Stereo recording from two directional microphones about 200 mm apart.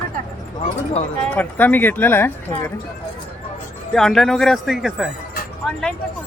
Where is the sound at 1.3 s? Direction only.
10° left (ahead or behind).